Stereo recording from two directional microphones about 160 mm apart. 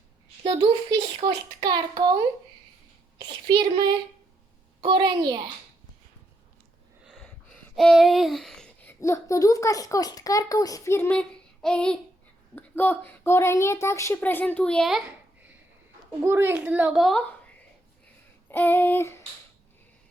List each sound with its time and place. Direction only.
0.4 s a child's voice: 30° right (ahead or behind)
3.2 s a child's voice: 30° right (ahead or behind)
7.0 s a sound: centre (ahead or behind)
11.2 s child singing: 5° left (ahead or behind)
12.5 s a woman's voice: 10° left (ahead or behind)
18.4 s child singing: 15° left (ahead or behind)